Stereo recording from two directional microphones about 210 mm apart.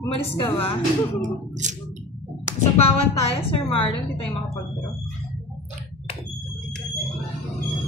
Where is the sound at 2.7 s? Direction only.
30° left (ahead or behind).